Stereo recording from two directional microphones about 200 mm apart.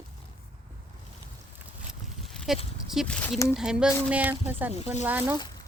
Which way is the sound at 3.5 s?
5° right (ahead or behind).